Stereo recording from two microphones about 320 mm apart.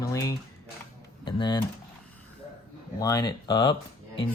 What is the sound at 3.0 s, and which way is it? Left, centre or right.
Speech, centre.